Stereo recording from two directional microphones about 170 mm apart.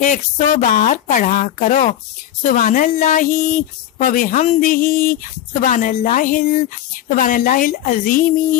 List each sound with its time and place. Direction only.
0.0 s speech: 50° left (ahead or behind)